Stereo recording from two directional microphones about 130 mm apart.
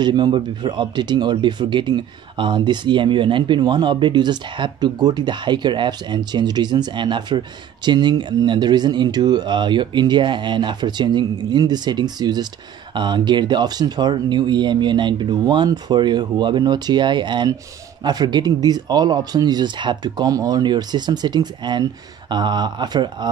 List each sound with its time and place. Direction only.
0.0 s speech: 35° right (ahead or behind)